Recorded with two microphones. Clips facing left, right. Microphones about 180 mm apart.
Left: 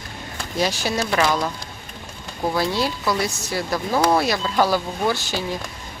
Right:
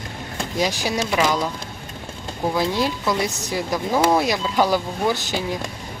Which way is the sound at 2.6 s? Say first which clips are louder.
Right 1 dB; 15° right (ahead or behind).